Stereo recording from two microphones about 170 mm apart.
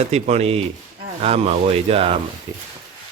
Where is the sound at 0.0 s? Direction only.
40° right (ahead or behind).